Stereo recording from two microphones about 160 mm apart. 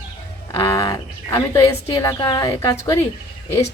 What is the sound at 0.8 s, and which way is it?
A woman's voice, 25° left (ahead or behind).